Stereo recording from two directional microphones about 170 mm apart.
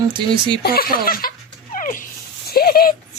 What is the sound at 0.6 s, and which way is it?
Speech, 65° left (ahead or behind).